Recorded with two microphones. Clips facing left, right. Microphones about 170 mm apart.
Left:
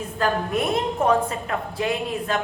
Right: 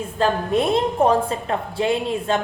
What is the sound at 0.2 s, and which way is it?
A woman's voice, 30° right (ahead or behind).